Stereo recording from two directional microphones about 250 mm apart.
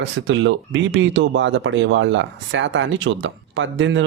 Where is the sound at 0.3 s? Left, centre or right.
Right.